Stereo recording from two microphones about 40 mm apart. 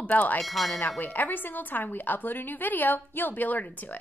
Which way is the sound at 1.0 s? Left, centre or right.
Left.